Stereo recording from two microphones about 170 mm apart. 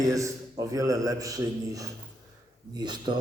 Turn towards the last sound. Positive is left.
turn(degrees=-25)  # may be behind; listen again after turning